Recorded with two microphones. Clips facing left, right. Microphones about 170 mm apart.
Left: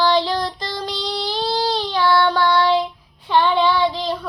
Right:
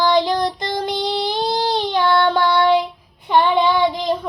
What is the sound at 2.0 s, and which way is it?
Child singing, 20° right (ahead or behind).